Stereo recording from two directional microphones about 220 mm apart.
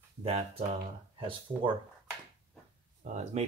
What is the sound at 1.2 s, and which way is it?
Speech, 25° right (ahead or behind).